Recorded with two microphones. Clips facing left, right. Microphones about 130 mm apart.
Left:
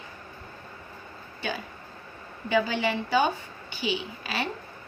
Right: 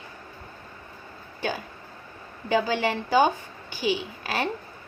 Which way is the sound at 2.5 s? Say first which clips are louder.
Right 1 dB; 40° right (ahead or behind).